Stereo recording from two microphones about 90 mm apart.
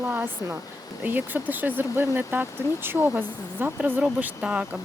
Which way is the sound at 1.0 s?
20° right (ahead or behind).